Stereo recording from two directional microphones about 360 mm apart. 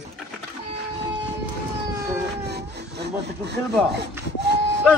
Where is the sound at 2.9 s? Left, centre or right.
Right.